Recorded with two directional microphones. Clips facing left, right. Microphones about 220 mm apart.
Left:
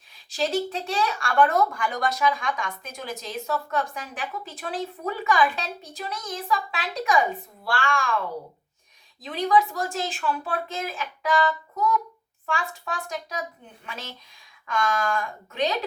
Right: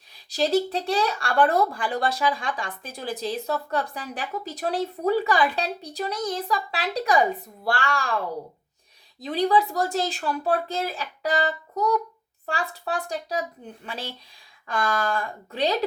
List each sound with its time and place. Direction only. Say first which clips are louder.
0.3 s speech: right 3 dB; 35° right (ahead or behind)
9.2 s speech: right 1 dB; 35° right (ahead or behind)